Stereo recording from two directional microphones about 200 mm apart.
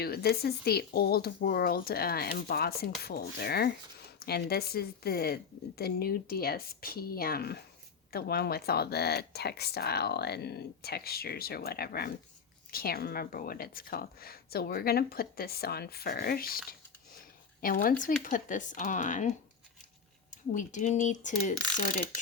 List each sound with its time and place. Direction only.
0.0 s speech: 50° left (ahead or behind)
17.6 s speech: 45° left (ahead or behind)